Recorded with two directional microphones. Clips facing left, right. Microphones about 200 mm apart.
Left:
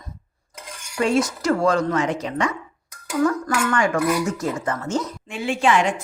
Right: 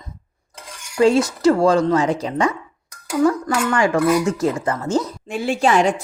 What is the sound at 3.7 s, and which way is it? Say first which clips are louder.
Speech: right 5 dB; 25° right (ahead or behind).